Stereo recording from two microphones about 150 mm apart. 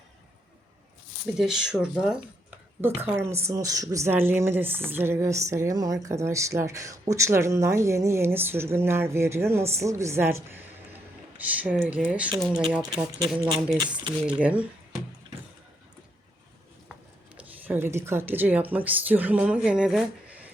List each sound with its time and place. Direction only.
1.4 s speech: 5° right (ahead or behind)
2.8 s a woman's voice: 15° right (ahead or behind)
12.9 s speech: 25° right (ahead or behind)
14.3 s a woman's voice: 10° right (ahead or behind)
17.3 s speech: 15° right (ahead or behind)